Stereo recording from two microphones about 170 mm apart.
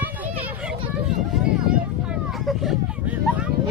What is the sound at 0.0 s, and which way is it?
Children playing, 10° right (ahead or behind).